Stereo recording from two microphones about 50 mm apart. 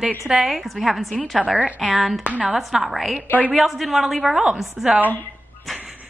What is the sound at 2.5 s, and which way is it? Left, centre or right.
A woman's voice, centre.